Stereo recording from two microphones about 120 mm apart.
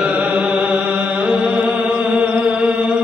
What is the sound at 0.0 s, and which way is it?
Music, 10° right (ahead or behind).